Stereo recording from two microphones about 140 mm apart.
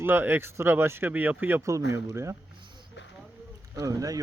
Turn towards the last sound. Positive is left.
turn(degrees=-25)  # may be behind; listen again after turning